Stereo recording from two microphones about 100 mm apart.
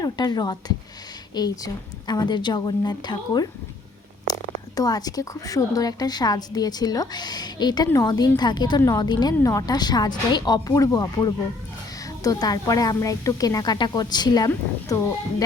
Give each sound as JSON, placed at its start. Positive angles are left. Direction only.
{"t": 0.0, "sound": "a woman's voice", "side_deg": 45}
{"t": 9.4, "sound": "speech", "side_deg": 35}